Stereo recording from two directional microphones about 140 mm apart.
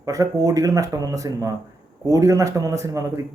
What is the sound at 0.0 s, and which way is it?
A man's voice, 25° right (ahead or behind).